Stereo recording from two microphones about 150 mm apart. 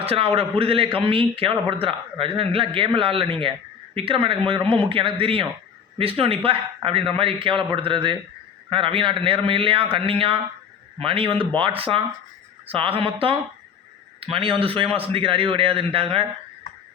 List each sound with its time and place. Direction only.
0.0 s a man's voice: 40° right (ahead or behind)